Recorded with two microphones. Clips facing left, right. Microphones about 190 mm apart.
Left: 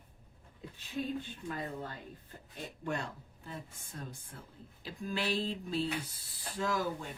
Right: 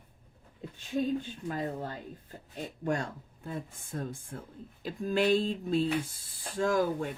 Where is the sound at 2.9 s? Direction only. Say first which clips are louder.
Right 4 dB; 45° right (ahead or behind).